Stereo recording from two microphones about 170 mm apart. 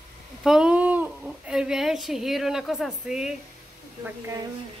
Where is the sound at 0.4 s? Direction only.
5° right (ahead or behind).